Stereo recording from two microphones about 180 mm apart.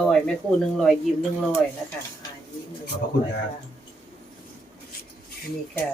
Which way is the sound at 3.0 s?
55° left (ahead or behind).